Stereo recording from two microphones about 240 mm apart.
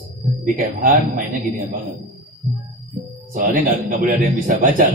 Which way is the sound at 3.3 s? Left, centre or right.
Right.